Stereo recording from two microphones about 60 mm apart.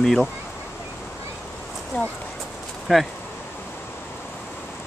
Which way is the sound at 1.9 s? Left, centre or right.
Left.